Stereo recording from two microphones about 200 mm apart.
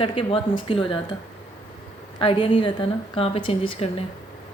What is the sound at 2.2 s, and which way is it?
Speech, 25° left (ahead or behind).